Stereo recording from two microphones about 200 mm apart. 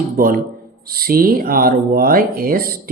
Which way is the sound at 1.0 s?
45° right (ahead or behind).